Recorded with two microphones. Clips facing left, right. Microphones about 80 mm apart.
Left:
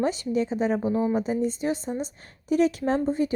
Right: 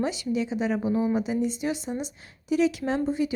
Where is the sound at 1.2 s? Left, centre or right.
Left.